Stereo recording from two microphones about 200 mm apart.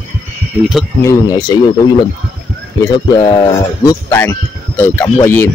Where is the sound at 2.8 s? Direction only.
25° left (ahead or behind).